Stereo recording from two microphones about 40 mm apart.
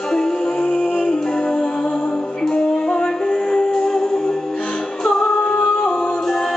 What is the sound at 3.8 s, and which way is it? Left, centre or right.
Music, centre.